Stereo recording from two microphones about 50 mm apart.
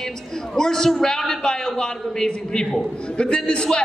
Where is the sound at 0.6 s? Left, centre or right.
Centre.